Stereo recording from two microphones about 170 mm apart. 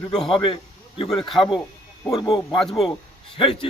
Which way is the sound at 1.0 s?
Centre (ahead or behind).